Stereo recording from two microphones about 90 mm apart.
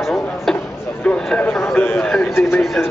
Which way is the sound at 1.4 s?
25° left (ahead or behind).